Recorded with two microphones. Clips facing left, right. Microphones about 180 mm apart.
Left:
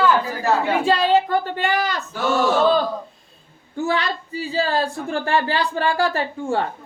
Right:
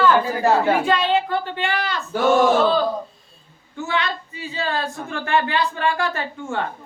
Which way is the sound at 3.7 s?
35° left (ahead or behind).